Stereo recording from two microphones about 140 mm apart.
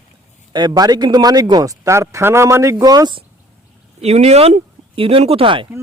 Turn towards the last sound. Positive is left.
turn(degrees=-35)  # may be behind; listen again after turning